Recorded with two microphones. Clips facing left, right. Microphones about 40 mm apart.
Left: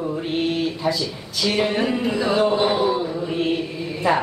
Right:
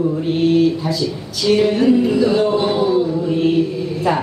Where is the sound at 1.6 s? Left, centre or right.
Centre.